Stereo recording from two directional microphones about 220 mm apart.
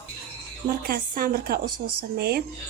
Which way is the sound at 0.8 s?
40° right (ahead or behind).